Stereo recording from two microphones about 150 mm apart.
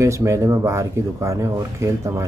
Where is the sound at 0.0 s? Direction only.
20° right (ahead or behind).